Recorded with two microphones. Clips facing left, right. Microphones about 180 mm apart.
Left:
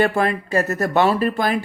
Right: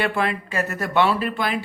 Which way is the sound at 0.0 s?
45° left (ahead or behind).